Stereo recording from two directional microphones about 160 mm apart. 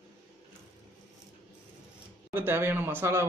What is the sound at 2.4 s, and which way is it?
Speech, 15° right (ahead or behind).